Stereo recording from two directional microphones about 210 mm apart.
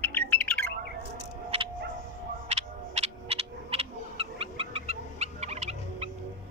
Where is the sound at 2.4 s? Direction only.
30° right (ahead or behind).